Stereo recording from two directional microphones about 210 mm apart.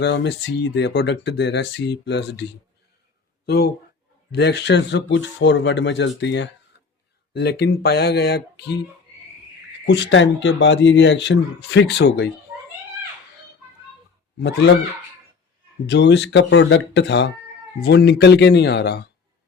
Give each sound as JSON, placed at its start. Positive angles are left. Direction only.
{"t": 0.0, "sound": "speech", "side_deg": 55}
{"t": 3.4, "sound": "speech", "side_deg": 50}
{"t": 9.8, "sound": "speech", "side_deg": 55}
{"t": 14.3, "sound": "speech", "side_deg": 55}
{"t": 15.9, "sound": "speech", "side_deg": 55}